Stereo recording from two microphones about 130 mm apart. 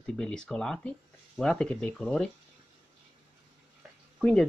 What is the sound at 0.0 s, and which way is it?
Speech, 5° left (ahead or behind).